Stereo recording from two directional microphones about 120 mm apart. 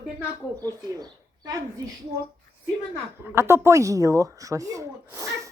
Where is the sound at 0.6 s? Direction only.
30° right (ahead or behind).